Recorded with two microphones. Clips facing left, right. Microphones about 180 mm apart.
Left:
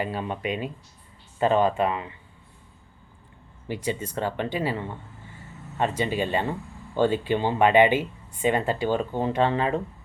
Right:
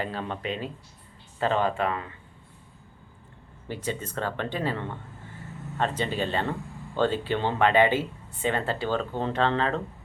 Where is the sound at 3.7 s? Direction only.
10° left (ahead or behind).